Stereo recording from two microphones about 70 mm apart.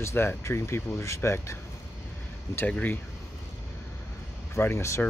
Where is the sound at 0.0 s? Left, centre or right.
Left.